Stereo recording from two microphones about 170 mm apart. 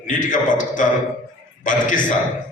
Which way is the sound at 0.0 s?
50° left (ahead or behind).